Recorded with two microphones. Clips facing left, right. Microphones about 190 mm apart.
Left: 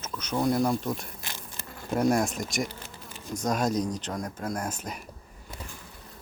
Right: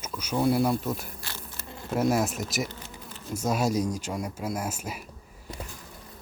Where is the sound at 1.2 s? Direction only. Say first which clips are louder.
Even; 20° left (ahead or behind).